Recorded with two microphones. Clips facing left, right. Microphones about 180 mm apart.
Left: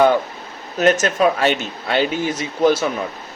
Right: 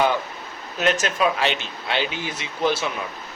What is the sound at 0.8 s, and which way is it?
Speech, 45° left (ahead or behind).